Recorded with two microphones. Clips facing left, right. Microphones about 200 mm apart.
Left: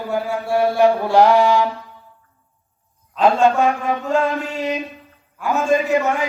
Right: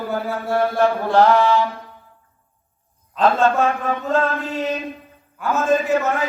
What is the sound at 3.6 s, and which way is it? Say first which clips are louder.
Mantra: left 1 dB; 15° left (ahead or behind).